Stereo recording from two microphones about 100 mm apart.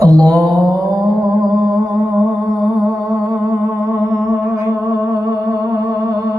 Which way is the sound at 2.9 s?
35° right (ahead or behind).